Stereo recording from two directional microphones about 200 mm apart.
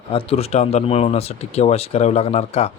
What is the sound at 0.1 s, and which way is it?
Speech, 30° left (ahead or behind).